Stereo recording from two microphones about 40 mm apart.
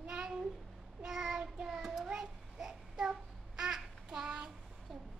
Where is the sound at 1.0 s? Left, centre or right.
Centre.